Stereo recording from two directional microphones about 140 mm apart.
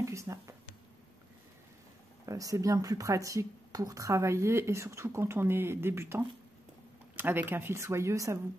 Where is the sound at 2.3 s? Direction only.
25° right (ahead or behind).